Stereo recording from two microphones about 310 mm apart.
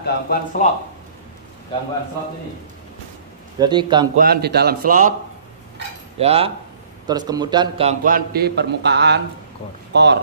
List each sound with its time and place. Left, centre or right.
0.0 s speech: left
3.5 s a man's voice: centre
4.2 s a man's voice: right
6.1 s a man's voice: centre; by 10.2 s right